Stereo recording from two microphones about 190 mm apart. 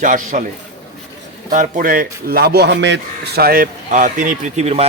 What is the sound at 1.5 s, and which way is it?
Speech, 45° right (ahead or behind).